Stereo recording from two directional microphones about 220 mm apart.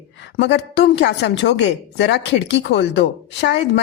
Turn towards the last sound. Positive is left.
turn(degrees=50)  # may be behind; listen again after turning